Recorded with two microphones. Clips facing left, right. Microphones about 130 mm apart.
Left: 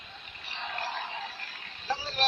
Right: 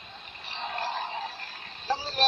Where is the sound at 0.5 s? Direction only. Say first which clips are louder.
Right 3 dB; 30° right (ahead or behind).